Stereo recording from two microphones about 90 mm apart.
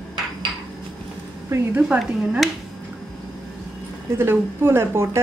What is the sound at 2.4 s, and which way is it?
Speech, centre (ahead or behind).